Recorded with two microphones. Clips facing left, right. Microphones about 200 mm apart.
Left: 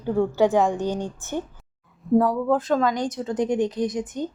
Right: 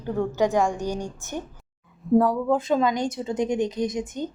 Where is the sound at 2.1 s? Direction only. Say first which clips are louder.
Even; centre (ahead or behind).